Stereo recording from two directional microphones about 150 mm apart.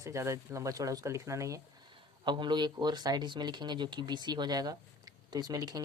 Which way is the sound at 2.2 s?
30° right (ahead or behind).